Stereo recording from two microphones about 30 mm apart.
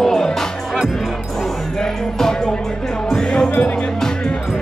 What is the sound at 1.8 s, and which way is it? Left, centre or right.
Music, centre.